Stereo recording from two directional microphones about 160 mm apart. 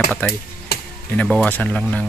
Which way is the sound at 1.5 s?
10° left (ahead or behind).